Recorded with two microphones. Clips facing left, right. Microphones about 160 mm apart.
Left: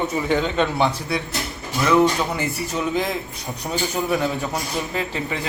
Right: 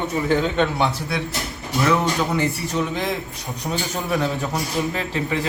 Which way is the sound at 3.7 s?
Centre (ahead or behind).